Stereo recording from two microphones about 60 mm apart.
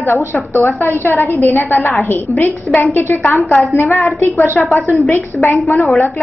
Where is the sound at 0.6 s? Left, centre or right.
Left.